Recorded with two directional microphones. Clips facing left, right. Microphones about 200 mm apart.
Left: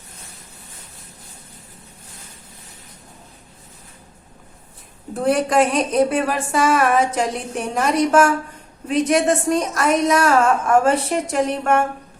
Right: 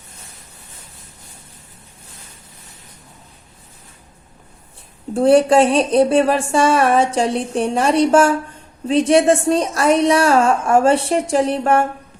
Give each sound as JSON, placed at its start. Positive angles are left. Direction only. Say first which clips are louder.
{"t": 5.1, "sound": "a woman's voice", "louder": "right 6 dB", "side_deg": -30}